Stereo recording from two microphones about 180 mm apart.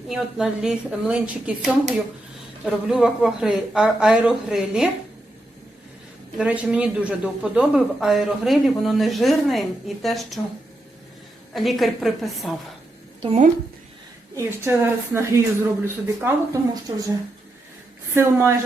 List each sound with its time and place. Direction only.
0.1 s speech: 5° right (ahead or behind)
6.3 s speech: 5° right (ahead or behind)
11.5 s speech: centre (ahead or behind)
13.2 s a woman's voice: 35° right (ahead or behind)
14.3 s a woman's voice: 15° right (ahead or behind)
18.1 s a woman's voice: 15° right (ahead or behind)